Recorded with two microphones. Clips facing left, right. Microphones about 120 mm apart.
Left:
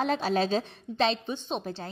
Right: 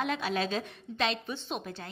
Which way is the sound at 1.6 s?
35° left (ahead or behind).